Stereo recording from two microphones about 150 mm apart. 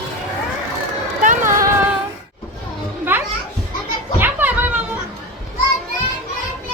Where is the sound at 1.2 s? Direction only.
60° right (ahead or behind).